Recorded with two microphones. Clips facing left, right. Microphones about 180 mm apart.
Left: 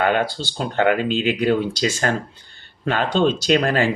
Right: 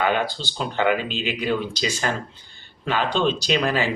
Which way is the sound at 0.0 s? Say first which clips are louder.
Left 3 dB; 50° left (ahead or behind).